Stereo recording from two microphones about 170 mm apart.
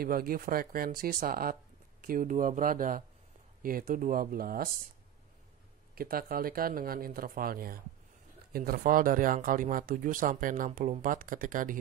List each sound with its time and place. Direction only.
0.0 s speech: 60° right (ahead or behind)
5.9 s speech: 60° right (ahead or behind)